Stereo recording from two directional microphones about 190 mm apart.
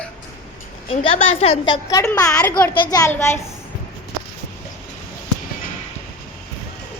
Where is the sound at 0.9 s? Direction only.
30° left (ahead or behind); by 3.3 s 15° left (ahead or behind).